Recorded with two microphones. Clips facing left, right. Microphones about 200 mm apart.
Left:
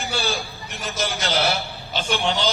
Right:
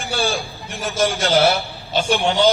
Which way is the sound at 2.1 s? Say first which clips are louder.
Right 5 dB; 50° right (ahead or behind).